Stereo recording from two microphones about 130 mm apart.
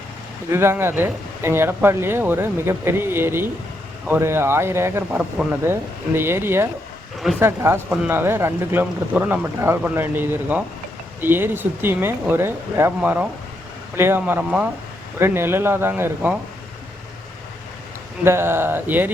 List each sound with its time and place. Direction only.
0.5 s speech: 20° right (ahead or behind)
18.3 s speech: 20° right (ahead or behind)